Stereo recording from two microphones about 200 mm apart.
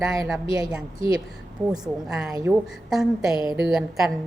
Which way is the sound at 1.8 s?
Centre (ahead or behind).